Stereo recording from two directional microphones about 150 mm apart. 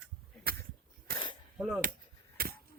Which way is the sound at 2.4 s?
90° right.